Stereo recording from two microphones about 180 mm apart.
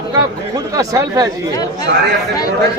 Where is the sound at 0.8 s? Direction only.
20° right (ahead or behind).